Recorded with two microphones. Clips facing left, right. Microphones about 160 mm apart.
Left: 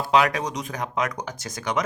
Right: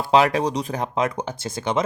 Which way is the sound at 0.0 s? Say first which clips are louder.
Right 3 dB; 30° right (ahead or behind).